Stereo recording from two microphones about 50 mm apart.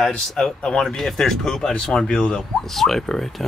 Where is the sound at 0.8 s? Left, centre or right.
Centre.